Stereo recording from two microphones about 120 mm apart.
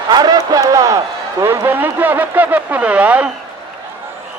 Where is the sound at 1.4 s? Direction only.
20° right (ahead or behind).